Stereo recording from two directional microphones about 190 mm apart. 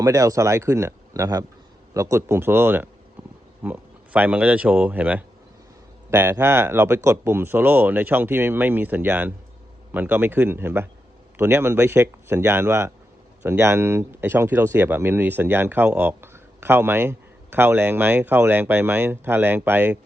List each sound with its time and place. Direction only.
0.0 s speech: 20° right (ahead or behind)